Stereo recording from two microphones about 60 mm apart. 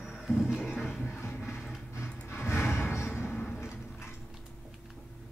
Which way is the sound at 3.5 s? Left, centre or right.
Left.